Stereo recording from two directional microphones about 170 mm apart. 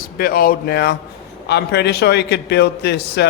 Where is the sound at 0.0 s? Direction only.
60° left (ahead or behind).